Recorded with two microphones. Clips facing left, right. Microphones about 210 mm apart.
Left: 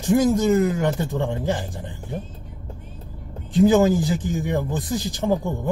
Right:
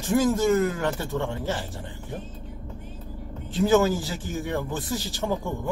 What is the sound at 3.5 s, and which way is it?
Speech, 20° left (ahead or behind).